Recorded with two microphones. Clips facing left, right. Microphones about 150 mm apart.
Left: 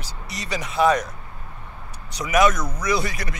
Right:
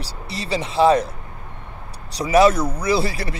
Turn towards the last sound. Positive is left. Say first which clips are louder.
# right 4 dB
turn(degrees=-30)  # may be behind; listen again after turning